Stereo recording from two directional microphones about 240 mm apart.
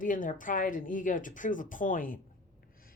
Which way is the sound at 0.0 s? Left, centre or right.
Left.